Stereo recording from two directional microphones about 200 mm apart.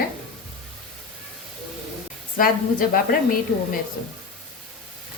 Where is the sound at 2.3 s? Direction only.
45° left (ahead or behind).